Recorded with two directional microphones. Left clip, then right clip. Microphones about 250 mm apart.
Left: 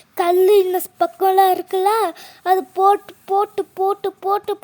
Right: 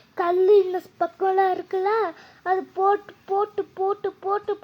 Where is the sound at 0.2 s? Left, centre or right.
Left.